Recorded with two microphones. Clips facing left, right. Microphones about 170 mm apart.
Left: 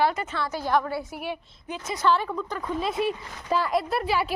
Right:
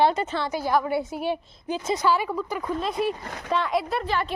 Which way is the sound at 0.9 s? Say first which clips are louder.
Right 5 dB; 20° right (ahead or behind).